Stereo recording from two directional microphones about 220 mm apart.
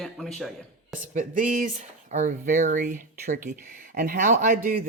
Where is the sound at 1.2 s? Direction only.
35° right (ahead or behind).